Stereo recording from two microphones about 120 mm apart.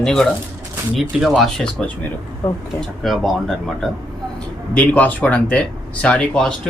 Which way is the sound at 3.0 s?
Centre (ahead or behind).